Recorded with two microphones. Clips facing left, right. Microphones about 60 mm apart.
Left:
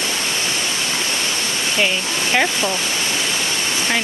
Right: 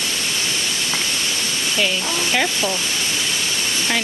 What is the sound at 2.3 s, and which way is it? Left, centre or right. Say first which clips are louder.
Speech: left 3 dB; left.